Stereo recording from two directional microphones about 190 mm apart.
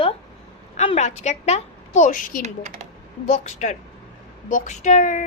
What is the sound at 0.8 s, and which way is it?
A woman's voice, 35° left (ahead or behind).